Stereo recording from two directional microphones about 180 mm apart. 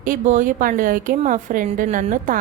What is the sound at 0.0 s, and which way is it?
Speech, 45° right (ahead or behind).